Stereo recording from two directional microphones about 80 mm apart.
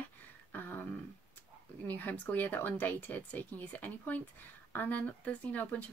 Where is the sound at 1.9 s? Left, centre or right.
Left.